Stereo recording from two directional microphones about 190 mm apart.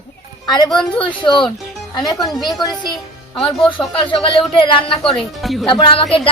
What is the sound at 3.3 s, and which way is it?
Speech, centre (ahead or behind).